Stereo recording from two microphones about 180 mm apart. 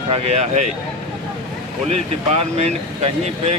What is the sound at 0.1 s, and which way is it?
Speech, 35° right (ahead or behind).